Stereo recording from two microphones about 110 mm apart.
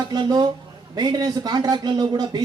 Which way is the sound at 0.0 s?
40° right (ahead or behind).